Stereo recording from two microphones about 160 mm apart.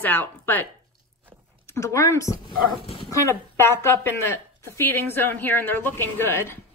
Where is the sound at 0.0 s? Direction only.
10° left (ahead or behind).